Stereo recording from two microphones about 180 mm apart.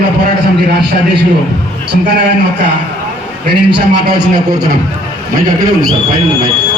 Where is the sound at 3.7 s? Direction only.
60° right (ahead or behind).